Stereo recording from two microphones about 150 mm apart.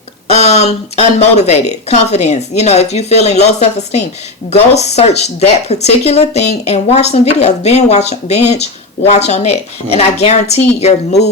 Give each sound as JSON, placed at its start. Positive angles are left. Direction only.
{"t": 0.3, "sound": "speech", "side_deg": 45}